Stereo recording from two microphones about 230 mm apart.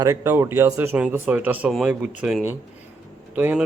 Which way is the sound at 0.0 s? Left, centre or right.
Centre.